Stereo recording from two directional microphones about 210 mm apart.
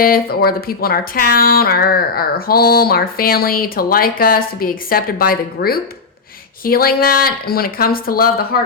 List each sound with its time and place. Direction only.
0.0 s speech: 45° left (ahead or behind)